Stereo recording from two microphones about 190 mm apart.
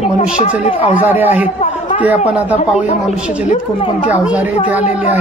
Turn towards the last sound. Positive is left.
turn(degrees=-5)  # may be behind; listen again after turning